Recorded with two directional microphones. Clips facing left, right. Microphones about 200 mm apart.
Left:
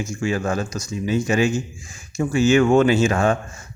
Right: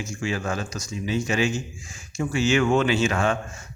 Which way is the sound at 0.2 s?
45° left (ahead or behind).